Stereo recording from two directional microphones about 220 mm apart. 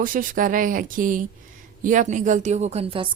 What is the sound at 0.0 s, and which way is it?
Speech, 40° right (ahead or behind).